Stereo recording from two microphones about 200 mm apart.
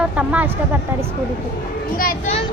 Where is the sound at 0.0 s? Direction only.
5° right (ahead or behind).